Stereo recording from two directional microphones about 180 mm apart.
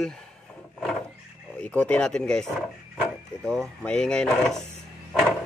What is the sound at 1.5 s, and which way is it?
Speech, 5° left (ahead or behind).